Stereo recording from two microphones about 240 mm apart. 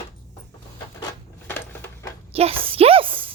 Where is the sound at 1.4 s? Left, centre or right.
Centre.